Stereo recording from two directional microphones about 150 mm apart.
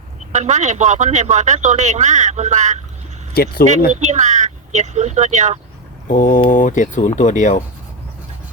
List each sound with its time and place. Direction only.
0.3 s a man's voice: 50° right (ahead or behind)
3.3 s speech: 90° left
4.0 s a man's voice: 50° right (ahead or behind)
6.1 s speech: 60° left (ahead or behind)